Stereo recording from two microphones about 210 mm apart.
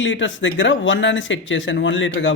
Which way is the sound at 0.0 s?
65° left (ahead or behind).